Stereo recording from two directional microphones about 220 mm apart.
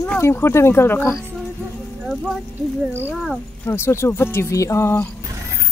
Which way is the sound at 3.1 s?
10° left (ahead or behind).